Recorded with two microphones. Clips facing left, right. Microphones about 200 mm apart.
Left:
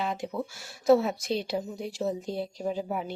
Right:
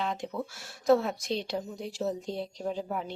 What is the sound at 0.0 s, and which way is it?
Speech, 5° left (ahead or behind).